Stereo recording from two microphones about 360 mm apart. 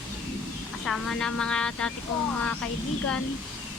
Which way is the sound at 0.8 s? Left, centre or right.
Centre.